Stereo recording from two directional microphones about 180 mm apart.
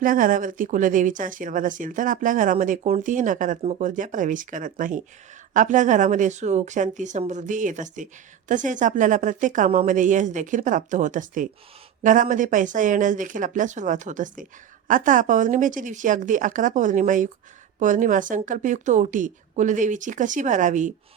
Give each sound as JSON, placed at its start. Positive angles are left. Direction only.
{"t": 0.0, "sound": "speech", "side_deg": -50}